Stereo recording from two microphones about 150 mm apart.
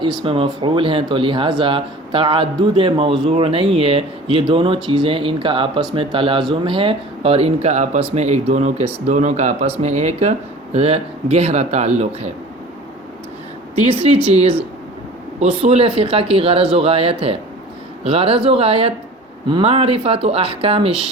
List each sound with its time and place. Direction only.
0.2 s a man's voice: 35° right (ahead or behind)
14.0 s speech: 45° right (ahead or behind)
15.4 s a man's voice: 40° right (ahead or behind)